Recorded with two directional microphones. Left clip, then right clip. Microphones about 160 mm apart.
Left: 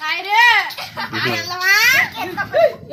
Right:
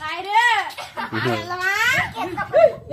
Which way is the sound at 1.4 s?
30° right (ahead or behind).